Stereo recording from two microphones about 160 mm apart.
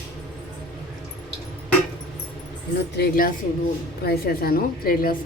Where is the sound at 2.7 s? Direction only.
85° left; by 5.1 s 65° left (ahead or behind).